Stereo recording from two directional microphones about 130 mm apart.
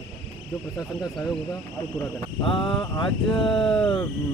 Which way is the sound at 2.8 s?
30° left (ahead or behind).